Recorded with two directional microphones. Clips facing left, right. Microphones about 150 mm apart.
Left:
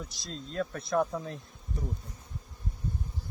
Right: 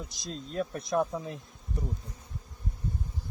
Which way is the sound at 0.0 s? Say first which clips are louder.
Right 2 dB; 20° right (ahead or behind).